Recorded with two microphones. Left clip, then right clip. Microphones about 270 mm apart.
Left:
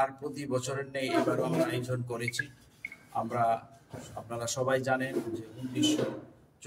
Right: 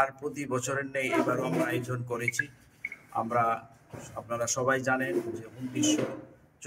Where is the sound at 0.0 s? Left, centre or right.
Centre.